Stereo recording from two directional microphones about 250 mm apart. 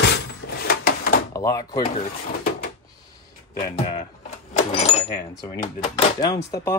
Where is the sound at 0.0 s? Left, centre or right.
Left.